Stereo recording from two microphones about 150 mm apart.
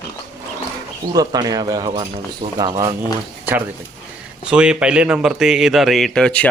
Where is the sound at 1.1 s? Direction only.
25° right (ahead or behind).